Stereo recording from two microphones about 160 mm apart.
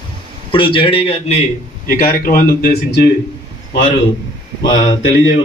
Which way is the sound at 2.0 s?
55° left (ahead or behind).